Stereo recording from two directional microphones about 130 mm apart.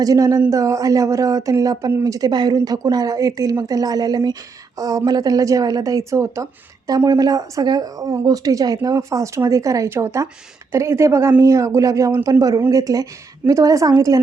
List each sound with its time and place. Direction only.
0.0 s a woman's voice: 25° right (ahead or behind)